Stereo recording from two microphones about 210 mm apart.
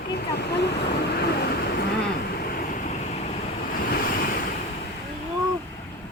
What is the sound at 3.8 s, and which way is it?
Waves, 45° left (ahead or behind).